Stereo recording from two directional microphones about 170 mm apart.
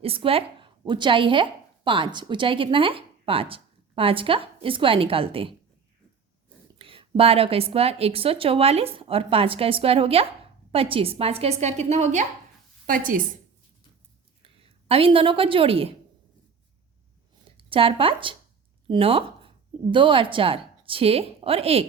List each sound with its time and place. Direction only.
0.0 s a woman's voice: 35° right (ahead or behind)
6.7 s a woman's voice: 30° right (ahead or behind)
12.9 s a woman's voice: 55° right (ahead or behind)
14.4 s a woman's voice: 35° right (ahead or behind)
17.6 s a woman's voice: 30° right (ahead or behind)